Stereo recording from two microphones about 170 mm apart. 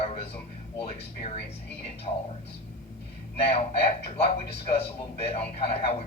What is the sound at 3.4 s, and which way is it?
Speech, 35° left (ahead or behind).